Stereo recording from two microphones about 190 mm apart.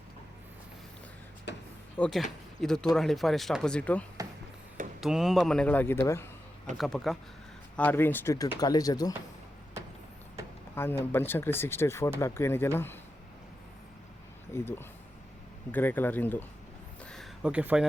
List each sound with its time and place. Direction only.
1.5 s speech: 65° left (ahead or behind)
2.0 s speech: centre (ahead or behind)
6.7 s speech: centre (ahead or behind); by 9.1 s 20° left (ahead or behind)
10.8 s speech: 10° left (ahead or behind)
14.5 s speech: 10° left (ahead or behind)
17.0 s a sound: centre (ahead or behind)